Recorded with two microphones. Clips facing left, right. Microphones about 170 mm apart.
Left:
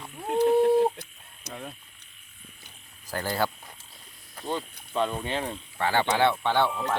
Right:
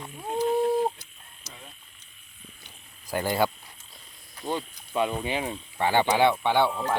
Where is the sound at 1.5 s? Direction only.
60° left (ahead or behind).